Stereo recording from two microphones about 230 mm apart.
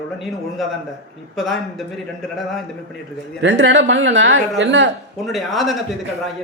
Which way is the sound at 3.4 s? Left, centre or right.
Right.